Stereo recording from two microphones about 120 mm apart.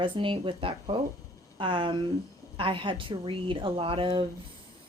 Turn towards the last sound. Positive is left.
turn(degrees=-50)  # may be behind; listen again after turning